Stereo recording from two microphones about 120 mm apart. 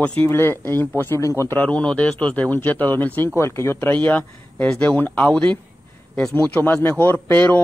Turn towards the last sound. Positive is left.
turn(degrees=15)  # may be behind; listen again after turning